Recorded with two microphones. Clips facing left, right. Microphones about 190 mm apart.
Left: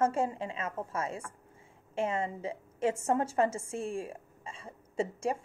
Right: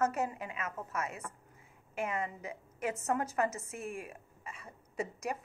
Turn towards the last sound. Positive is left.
turn(degrees=30)  # may be behind; listen again after turning